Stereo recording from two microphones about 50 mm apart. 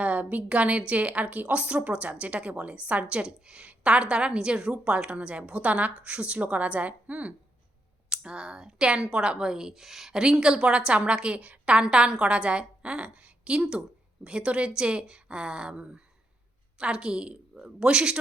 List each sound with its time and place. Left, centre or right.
0.0 s a sound: right
0.4 s a woman's voice: right
8.1 s a woman's voice: centre